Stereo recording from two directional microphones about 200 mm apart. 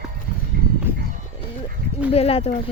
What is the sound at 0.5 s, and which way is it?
Livestock, 45° right (ahead or behind).